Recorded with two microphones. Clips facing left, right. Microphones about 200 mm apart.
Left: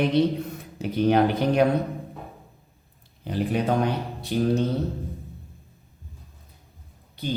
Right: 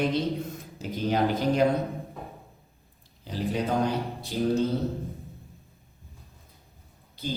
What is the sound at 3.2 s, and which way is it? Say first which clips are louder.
A man's voice: left 4 dB; 60° left (ahead or behind).